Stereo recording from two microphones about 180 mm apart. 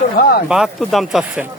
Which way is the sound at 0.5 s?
Centre (ahead or behind).